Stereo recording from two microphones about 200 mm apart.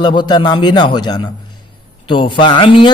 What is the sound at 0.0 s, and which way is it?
A man's voice, 20° left (ahead or behind).